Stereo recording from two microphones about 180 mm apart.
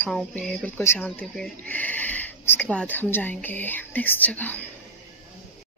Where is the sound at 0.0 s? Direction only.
Centre (ahead or behind).